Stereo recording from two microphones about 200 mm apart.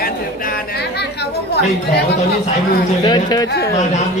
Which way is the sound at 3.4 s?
55° left (ahead or behind).